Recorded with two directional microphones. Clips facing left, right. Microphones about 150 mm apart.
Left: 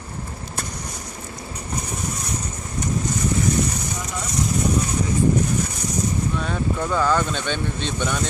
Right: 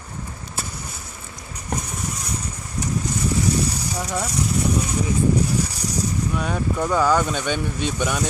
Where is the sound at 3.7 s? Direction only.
35° right (ahead or behind).